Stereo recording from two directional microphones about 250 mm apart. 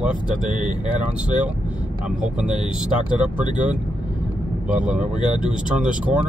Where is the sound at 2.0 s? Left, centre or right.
Centre.